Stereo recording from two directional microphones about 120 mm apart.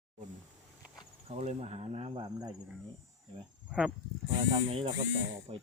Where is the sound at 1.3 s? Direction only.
60° right (ahead or behind).